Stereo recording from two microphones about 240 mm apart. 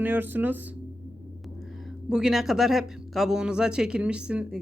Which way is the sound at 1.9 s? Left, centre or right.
Centre.